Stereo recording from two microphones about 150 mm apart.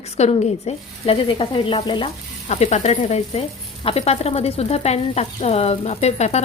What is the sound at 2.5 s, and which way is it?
Sizzle, 50° left (ahead or behind).